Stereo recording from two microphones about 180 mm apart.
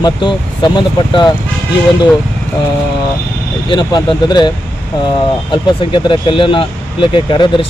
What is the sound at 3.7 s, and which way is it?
Speech, 25° left (ahead or behind).